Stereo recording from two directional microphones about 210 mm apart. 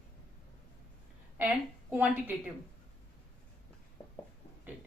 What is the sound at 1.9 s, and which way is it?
Speech, 10° right (ahead or behind).